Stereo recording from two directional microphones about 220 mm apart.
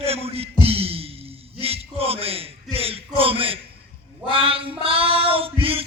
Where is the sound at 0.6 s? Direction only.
25° right (ahead or behind).